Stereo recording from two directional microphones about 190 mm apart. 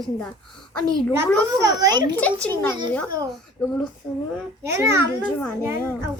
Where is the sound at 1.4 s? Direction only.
20° right (ahead or behind).